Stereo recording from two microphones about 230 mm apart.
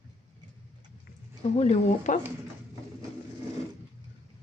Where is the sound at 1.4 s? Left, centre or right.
Left.